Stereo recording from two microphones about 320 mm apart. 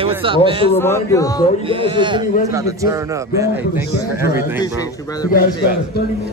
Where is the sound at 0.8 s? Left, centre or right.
Centre.